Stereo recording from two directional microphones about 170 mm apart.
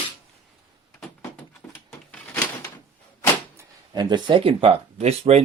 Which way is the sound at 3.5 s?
25° right (ahead or behind).